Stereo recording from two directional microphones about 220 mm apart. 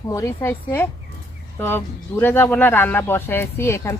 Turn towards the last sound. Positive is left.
turn(degrees=10)  # may be behind; listen again after turning